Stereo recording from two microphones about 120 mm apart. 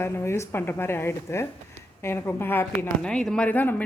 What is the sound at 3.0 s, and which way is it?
Speech, 10° left (ahead or behind).